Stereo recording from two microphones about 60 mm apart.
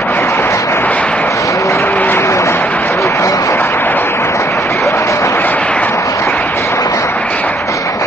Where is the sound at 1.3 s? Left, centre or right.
Left.